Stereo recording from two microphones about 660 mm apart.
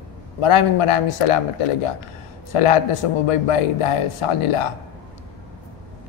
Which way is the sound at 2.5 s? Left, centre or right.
Left.